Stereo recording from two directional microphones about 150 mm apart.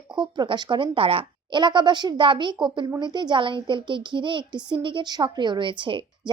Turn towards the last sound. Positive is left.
turn(degrees=-35)  # may be behind; listen again after turning